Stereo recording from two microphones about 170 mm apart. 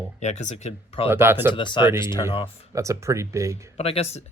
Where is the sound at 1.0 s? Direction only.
15° right (ahead or behind).